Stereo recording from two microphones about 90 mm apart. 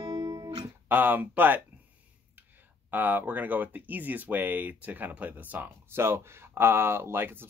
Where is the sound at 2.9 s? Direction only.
20° right (ahead or behind).